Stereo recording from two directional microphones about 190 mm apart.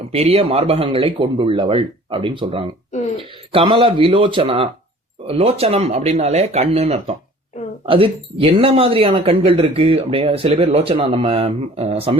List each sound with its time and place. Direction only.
0.1 s speech: 30° right (ahead or behind)